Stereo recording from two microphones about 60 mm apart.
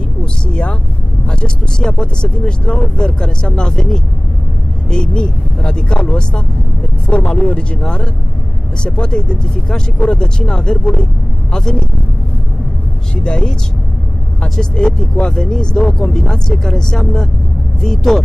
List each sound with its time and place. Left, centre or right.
0.2 s speech: centre
13.1 s speech: centre